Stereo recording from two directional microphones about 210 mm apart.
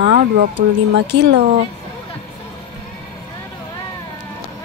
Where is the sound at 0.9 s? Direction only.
55° right (ahead or behind).